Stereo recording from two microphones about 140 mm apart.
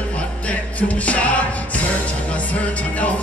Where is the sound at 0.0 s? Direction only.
10° left (ahead or behind).